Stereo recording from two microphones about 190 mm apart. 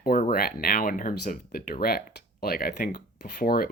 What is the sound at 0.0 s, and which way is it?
Speech, 50° left (ahead or behind).